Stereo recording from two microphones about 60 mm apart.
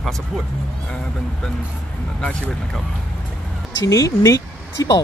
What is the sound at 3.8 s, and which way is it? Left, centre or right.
Speech, left.